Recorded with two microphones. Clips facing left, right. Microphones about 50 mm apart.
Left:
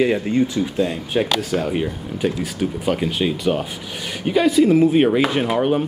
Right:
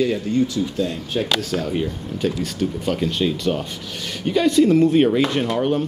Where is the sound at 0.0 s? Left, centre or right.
Left.